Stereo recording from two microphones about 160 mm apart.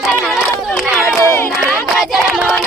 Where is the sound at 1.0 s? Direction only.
15° left (ahead or behind).